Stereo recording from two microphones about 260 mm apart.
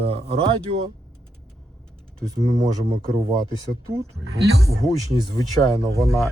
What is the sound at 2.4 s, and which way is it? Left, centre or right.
Speech, right.